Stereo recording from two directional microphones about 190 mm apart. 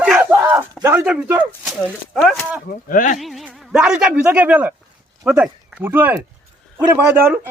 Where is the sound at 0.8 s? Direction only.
10° right (ahead or behind).